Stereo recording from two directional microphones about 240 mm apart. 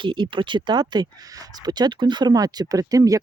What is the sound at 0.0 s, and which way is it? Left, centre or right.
Speech, centre.